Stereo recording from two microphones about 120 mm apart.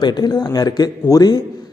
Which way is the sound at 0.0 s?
35° left (ahead or behind).